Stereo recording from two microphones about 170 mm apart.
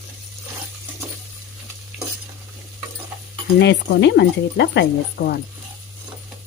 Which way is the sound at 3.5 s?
90° left.